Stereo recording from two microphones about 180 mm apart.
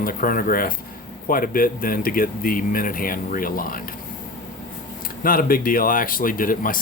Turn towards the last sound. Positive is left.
turn(degrees=50)  # may be behind; listen again after turning